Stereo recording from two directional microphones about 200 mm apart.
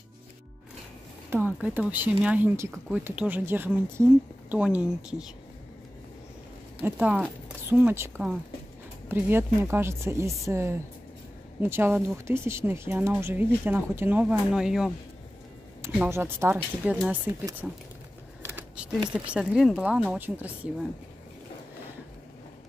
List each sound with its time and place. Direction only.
1.3 s speech: 10° right (ahead or behind)
6.8 s speech: 5° right (ahead or behind)
18.4 s keys jangling: 10° right (ahead or behind)
19.3 s speech: centre (ahead or behind)